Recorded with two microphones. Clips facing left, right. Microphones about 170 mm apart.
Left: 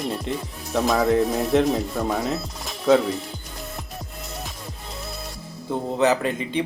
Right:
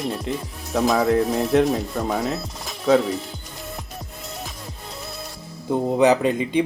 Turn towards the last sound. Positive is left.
turn(degrees=-15)  # may be behind; listen again after turning